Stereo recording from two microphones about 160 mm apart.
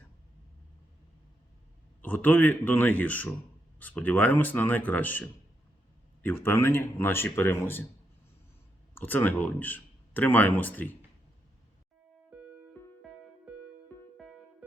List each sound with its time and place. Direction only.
2.0 s speech: 10° left (ahead or behind)
9.0 s speech: 10° left (ahead or behind)